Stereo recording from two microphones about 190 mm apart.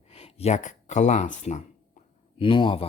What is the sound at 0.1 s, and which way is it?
Speech, 30° left (ahead or behind).